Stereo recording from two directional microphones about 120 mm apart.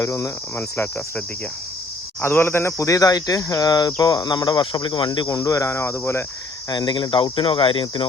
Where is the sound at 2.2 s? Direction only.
20° left (ahead or behind).